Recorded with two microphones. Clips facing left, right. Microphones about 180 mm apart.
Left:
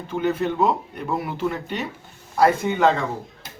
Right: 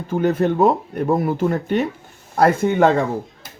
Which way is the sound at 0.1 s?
45° right (ahead or behind).